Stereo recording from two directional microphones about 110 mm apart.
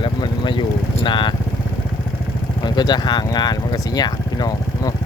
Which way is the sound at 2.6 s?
40° left (ahead or behind).